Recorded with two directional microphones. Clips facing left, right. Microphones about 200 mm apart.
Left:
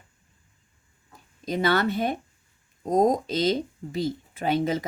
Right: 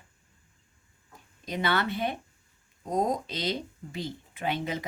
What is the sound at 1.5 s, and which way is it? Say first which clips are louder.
Speech: left 5 dB; 40° left (ahead or behind).